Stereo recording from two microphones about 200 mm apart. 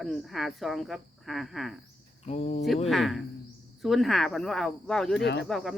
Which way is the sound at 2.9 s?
Centre (ahead or behind).